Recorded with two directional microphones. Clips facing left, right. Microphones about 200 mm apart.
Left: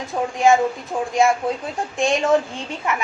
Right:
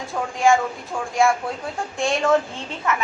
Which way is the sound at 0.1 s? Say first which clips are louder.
Left 2 dB; 20° left (ahead or behind).